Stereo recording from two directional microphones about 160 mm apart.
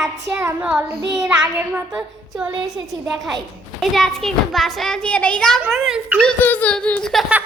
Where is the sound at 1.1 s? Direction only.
5° right (ahead or behind).